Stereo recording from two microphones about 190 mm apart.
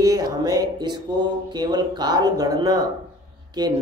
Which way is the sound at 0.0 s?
20° right (ahead or behind).